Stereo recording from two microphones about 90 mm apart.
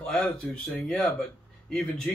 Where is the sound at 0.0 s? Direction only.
15° left (ahead or behind).